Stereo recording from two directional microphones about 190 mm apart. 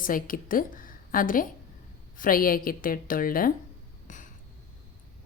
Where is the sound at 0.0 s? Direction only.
45° left (ahead or behind).